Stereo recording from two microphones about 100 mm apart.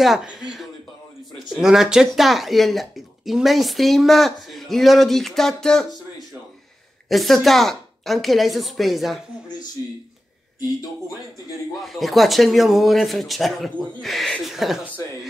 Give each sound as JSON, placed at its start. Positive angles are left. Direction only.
{"t": 0.0, "sound": "speech", "side_deg": -5}
{"t": 11.8, "sound": "speech", "side_deg": 0}